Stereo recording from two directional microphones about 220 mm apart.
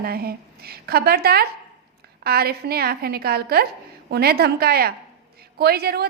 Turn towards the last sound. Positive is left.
turn(degrees=-45)  # may be behind; listen again after turning